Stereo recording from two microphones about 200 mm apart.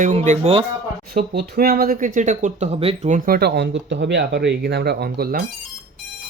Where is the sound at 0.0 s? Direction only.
35° right (ahead or behind).